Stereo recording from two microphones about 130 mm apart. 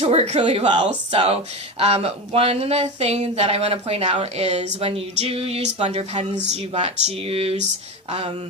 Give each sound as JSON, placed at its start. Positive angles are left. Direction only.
{"t": 0.0, "sound": "speech", "side_deg": -50}